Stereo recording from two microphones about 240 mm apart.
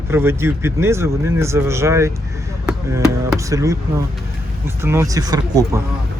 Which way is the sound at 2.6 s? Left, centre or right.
Centre.